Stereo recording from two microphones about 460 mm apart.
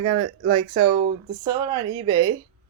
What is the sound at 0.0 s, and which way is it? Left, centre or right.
Speech, right.